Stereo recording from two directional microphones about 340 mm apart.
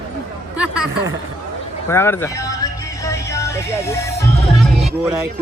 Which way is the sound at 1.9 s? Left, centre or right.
Centre.